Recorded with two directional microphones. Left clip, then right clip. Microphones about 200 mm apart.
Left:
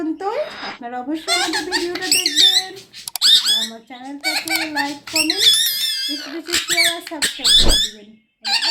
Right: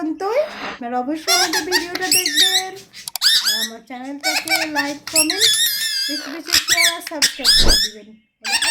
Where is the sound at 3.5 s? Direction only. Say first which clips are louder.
Left 3 dB; 45° right (ahead or behind).